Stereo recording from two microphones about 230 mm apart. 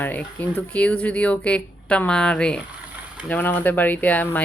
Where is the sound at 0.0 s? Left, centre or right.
Centre.